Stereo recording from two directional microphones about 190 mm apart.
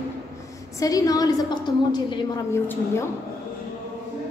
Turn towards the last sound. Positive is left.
turn(degrees=15)  # may be behind; listen again after turning